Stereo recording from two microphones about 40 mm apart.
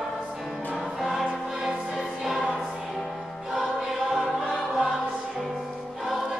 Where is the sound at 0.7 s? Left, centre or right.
Centre.